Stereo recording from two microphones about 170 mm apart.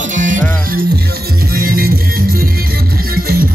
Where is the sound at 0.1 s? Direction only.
50° right (ahead or behind).